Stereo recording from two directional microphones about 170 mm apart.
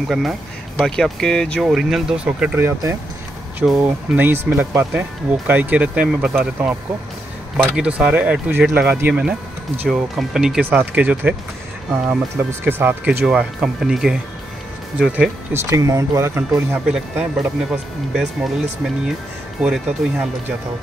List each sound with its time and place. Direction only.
0.1 s speech: centre (ahead or behind)
12.6 s speech: 15° right (ahead or behind)
15.5 s speech: 15° right (ahead or behind)
16.8 s speech: 5° right (ahead or behind)
19.6 s speech: 5° right (ahead or behind)